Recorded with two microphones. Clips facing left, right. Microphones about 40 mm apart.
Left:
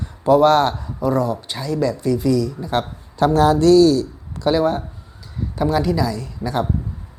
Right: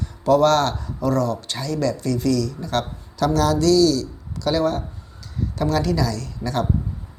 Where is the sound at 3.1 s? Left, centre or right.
Left.